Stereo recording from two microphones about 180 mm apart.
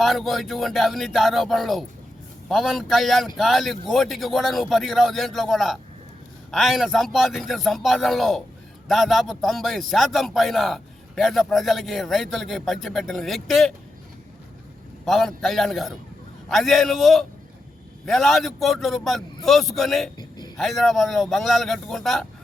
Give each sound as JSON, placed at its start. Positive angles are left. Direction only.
{"t": 0.0, "sound": "a man's voice", "side_deg": 0}
{"t": 15.0, "sound": "a man's voice", "side_deg": 0}
{"t": 20.1, "sound": "a sound", "side_deg": 20}
{"t": 20.6, "sound": "a man's voice", "side_deg": 0}